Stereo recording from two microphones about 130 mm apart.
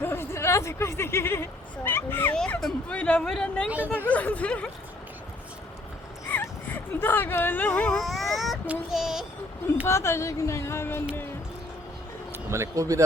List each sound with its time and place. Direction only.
0.0 s speech: 20° left (ahead or behind)
2.3 s speech: 5° left (ahead or behind)
6.3 s speech: 15° left (ahead or behind)
7.9 s speech: centre (ahead or behind)
9.8 s speech: 20° left (ahead or behind)
12.3 s speech: 20° right (ahead or behind)